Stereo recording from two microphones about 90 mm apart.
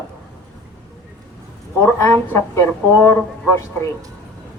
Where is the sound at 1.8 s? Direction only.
25° left (ahead or behind).